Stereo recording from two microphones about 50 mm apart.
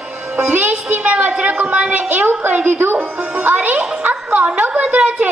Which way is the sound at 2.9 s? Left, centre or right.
Right.